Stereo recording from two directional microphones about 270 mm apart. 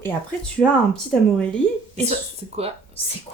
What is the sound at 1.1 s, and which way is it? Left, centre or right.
Speech, centre.